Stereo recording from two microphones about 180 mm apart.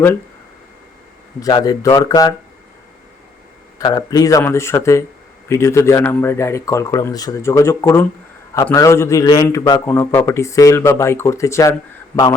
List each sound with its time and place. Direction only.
1.4 s speech: 20° left (ahead or behind)
3.8 s speech: 20° left (ahead or behind)